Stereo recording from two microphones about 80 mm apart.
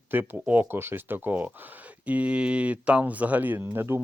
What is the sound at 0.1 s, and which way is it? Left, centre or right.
Speech, right.